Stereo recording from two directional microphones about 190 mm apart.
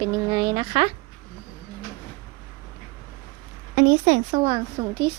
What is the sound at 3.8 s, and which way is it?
A woman's voice, 40° right (ahead or behind).